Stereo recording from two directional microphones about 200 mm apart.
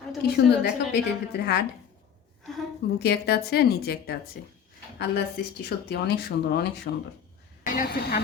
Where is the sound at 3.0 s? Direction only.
55° left (ahead or behind).